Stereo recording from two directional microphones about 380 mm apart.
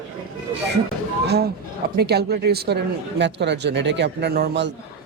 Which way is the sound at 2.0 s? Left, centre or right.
Right.